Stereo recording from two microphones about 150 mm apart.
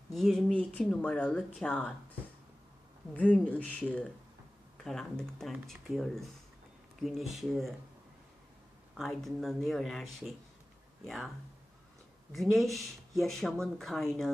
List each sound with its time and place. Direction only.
0.1 s speech: centre (ahead or behind)
3.2 s speech: 10° left (ahead or behind)
9.0 s speech: centre (ahead or behind)
12.3 s speech: centre (ahead or behind)